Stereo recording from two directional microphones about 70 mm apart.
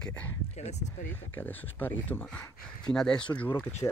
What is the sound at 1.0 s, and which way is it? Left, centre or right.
Speech, left.